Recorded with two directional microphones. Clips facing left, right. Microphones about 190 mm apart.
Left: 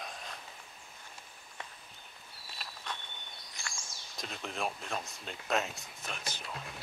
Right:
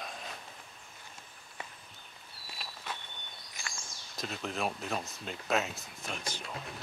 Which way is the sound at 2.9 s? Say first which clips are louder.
Right 1 dB; 5° right (ahead or behind).